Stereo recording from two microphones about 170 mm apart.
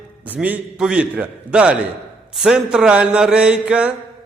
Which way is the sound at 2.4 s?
5° right (ahead or behind).